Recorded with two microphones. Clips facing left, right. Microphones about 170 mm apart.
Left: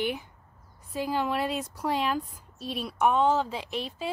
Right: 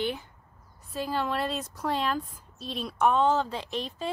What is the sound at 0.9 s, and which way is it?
Speech, 15° left (ahead or behind).